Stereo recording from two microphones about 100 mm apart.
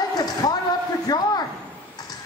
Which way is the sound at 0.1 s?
40° left (ahead or behind).